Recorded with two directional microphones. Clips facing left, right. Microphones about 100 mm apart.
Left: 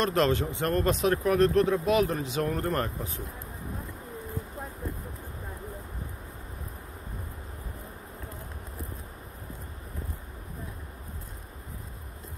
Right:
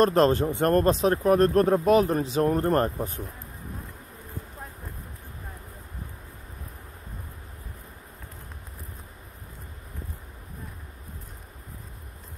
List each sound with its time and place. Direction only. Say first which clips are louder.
0.0 s speech: right 5 dB; 40° right (ahead or behind)